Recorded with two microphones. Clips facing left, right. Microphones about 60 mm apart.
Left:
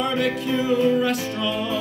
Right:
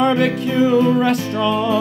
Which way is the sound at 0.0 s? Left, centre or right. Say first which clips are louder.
Right 7 dB; right.